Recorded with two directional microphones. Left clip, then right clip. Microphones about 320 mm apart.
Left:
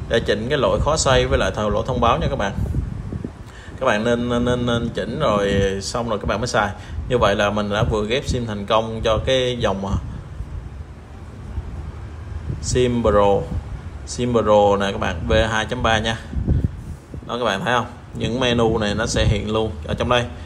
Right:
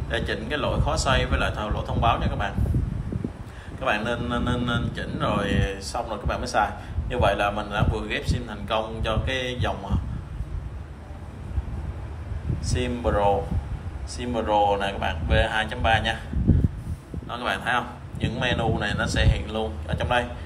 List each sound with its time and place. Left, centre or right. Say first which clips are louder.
0.1 s a man's voice: left 8 dB; centre
3.8 s a man's voice: left 7 dB; centre
12.6 s a man's voice: left 9 dB; left
17.3 s speech: left 5 dB; centre